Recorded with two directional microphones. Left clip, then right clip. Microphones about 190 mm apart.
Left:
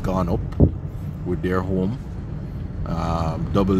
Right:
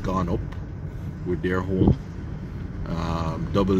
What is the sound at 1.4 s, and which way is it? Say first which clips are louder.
Speech: left 3 dB; 15° left (ahead or behind).